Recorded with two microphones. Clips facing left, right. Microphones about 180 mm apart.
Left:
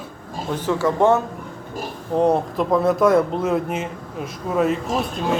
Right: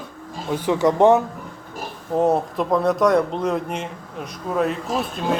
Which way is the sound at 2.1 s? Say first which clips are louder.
Left 1 dB; centre (ahead or behind).